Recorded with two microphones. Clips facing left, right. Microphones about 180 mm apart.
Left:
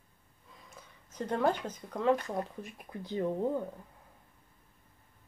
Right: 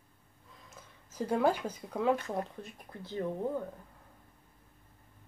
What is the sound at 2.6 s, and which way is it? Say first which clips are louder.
Speech: left 3 dB; 15° left (ahead or behind).